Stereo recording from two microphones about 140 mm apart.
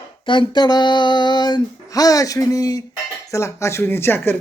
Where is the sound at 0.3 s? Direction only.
35° left (ahead or behind).